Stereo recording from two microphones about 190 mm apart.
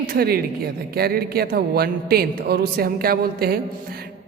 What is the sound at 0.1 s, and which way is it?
A woman's voice, 50° right (ahead or behind).